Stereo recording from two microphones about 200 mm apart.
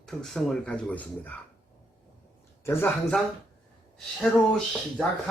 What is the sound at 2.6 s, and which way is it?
Speech, 10° left (ahead or behind).